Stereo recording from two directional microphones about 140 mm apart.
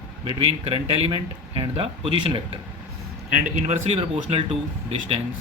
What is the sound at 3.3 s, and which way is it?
Speech, 60° right (ahead or behind).